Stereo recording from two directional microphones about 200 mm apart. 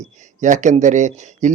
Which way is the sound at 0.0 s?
35° right (ahead or behind).